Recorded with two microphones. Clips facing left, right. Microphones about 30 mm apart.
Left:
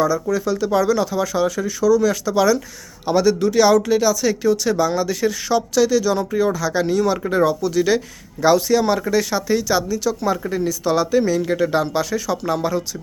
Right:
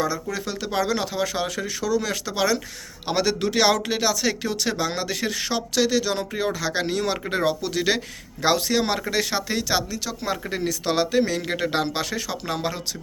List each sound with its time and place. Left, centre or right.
0.0 s speech: right
8.4 s speech: right
10.5 s speech: right
11.3 s speech: right